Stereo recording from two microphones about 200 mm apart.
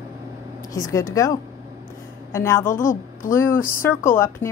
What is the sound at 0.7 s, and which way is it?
A woman's voice, 15° left (ahead or behind).